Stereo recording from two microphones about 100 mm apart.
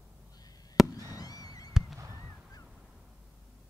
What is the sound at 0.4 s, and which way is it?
Fireworks, 40° left (ahead or behind).